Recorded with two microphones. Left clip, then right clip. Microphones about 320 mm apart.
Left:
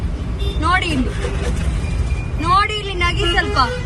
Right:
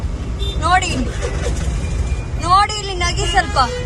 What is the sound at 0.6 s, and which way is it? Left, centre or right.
Speech, centre.